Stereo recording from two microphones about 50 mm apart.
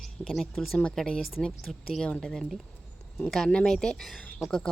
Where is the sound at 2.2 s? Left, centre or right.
Centre.